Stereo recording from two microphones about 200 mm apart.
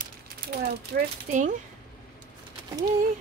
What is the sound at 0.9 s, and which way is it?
Speech, 45° right (ahead or behind).